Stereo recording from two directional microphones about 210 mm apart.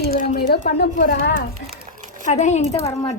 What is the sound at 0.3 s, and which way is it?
Speech, 50° left (ahead or behind).